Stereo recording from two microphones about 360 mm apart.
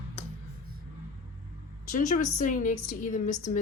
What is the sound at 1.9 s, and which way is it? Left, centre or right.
A woman's voice, left.